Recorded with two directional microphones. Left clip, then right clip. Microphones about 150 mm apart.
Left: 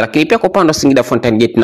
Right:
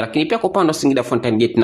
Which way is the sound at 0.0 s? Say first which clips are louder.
Left 7 dB; 45° left (ahead or behind).